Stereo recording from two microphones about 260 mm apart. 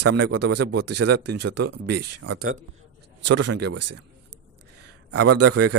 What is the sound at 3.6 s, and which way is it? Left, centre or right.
Speech, right.